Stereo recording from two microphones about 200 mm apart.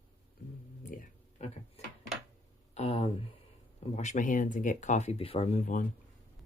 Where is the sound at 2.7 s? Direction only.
30° left (ahead or behind).